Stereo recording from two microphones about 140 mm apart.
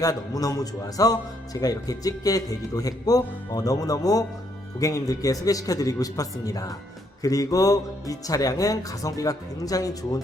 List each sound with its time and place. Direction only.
0.0 s speech: 25° left (ahead or behind)